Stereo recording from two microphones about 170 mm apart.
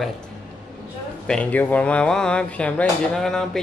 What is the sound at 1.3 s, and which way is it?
Speech, 10° left (ahead or behind).